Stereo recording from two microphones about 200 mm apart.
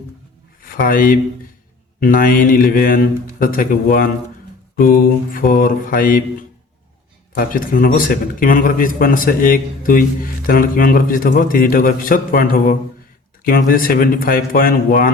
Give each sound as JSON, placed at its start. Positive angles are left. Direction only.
{"t": 0.6, "sound": "a man's voice", "side_deg": 45}
{"t": 7.3, "sound": "a man's voice", "side_deg": 45}